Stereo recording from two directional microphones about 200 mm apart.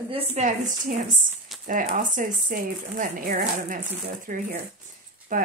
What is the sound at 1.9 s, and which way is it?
Speech, 40° right (ahead or behind).